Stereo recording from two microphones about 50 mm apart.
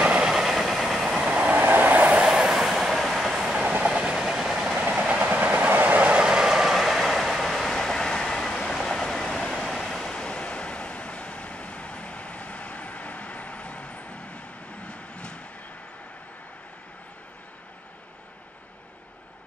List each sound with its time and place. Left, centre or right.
0.0 s vehicle: right
0.3 s train: centre
1.5 s train: right; by 2.5 s centre
2.5 s train: centre
3.8 s train: centre
5.1 s train: right
6.2 s train: centre
8.7 s a sound: centre; by 15.4 s left